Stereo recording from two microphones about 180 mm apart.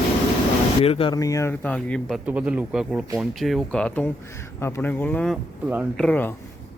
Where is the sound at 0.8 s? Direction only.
30° left (ahead or behind).